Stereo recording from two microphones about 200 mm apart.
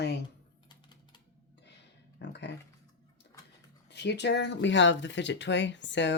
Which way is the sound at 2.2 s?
60° left (ahead or behind).